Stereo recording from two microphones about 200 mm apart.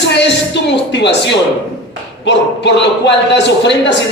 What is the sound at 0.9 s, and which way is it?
A man's voice, 60° left (ahead or behind).